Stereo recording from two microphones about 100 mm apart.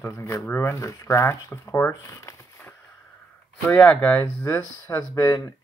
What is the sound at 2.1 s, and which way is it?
Crumpling, 30° left (ahead or behind).